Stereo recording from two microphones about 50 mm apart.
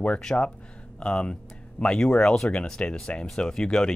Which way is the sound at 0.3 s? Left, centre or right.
Left.